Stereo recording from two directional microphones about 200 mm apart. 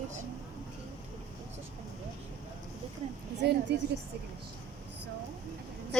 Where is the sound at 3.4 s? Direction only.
50° right (ahead or behind).